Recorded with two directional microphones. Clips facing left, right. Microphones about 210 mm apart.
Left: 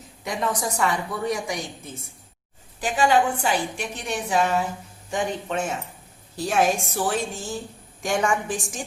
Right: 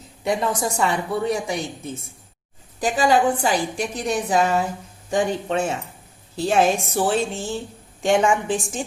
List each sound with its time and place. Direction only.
0.3 s a woman's voice: 30° right (ahead or behind)